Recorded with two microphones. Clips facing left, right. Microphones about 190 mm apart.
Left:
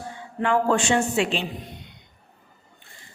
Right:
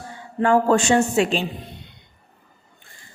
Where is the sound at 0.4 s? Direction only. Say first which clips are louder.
Right 4 dB; 40° right (ahead or behind).